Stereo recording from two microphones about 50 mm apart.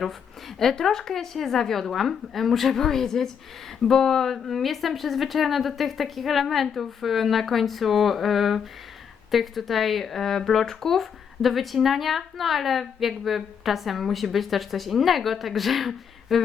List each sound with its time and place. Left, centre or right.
0.0 s a woman's voice: centre